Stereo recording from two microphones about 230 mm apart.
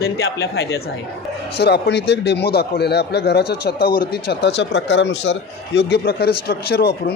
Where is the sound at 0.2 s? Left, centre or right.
Left.